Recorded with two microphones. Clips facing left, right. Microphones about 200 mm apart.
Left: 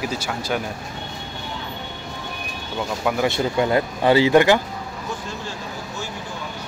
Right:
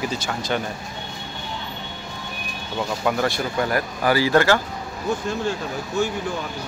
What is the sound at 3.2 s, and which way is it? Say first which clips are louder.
Speech: left 3 dB; 20° left (ahead or behind).